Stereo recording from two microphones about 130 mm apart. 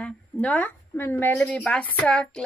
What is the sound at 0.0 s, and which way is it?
Speech, 10° left (ahead or behind).